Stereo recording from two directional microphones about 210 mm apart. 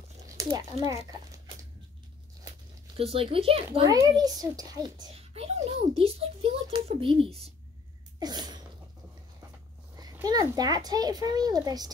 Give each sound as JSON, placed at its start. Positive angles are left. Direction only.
{"t": 0.4, "sound": "speech", "side_deg": -15}
{"t": 3.0, "sound": "a child's voice", "side_deg": -25}
{"t": 8.2, "sound": "sneeze", "side_deg": -20}
{"t": 9.9, "sound": "a child's voice", "side_deg": -20}